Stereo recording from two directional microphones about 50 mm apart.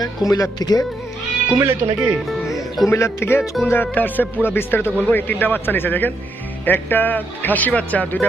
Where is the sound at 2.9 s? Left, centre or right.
Left.